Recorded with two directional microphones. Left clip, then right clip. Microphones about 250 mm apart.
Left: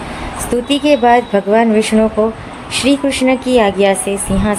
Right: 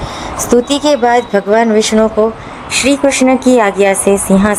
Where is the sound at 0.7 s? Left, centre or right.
Right.